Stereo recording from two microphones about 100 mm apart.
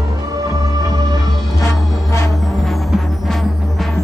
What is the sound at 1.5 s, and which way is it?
Music, 30° left (ahead or behind).